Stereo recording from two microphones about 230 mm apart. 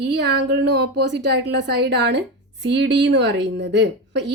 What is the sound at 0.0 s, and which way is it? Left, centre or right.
Speech, right.